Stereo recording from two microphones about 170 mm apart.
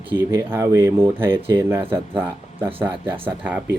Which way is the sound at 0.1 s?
15° right (ahead or behind).